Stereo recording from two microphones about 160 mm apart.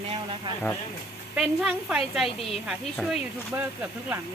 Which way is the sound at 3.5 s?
15° right (ahead or behind).